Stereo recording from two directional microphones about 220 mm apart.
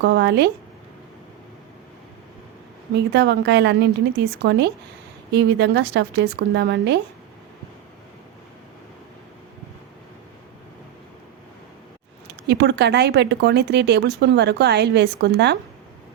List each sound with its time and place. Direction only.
0.0 s speech: 50° right (ahead or behind)
2.9 s speech: 50° right (ahead or behind)
12.3 s speech: 50° right (ahead or behind)